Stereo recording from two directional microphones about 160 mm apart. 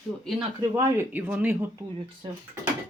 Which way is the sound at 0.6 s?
20° right (ahead or behind).